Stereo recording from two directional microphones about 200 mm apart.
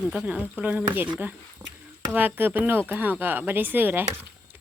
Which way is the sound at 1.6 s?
20° right (ahead or behind).